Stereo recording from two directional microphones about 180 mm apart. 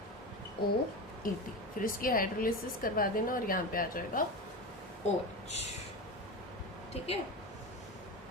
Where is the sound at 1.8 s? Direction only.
50° left (ahead or behind).